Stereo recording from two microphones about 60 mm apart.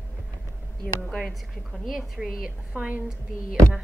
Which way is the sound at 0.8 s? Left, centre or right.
Centre.